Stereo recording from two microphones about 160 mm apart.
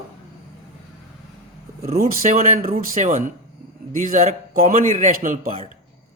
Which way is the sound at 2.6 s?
65° right (ahead or behind).